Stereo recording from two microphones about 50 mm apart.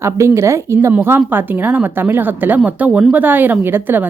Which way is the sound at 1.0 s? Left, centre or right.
Right.